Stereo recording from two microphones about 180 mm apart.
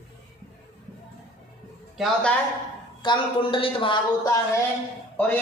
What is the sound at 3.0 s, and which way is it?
Speech, 30° left (ahead or behind).